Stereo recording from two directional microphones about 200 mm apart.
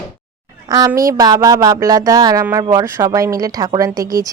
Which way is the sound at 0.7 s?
20° right (ahead or behind).